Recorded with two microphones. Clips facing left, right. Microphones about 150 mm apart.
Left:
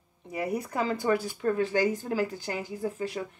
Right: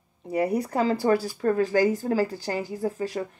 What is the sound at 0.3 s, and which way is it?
Speech, 35° right (ahead or behind).